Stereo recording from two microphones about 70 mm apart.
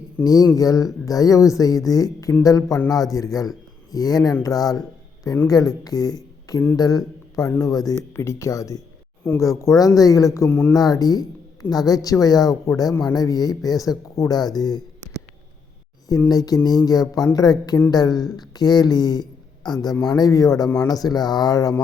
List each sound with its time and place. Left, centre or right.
0.5 s a woman's voice: left
8.1 s speech: left
10.5 s speech: left
10.8 s a woman's voice: left
12.6 s a woman's voice: left
14.2 s speech: left
16.3 s a woman's voice: left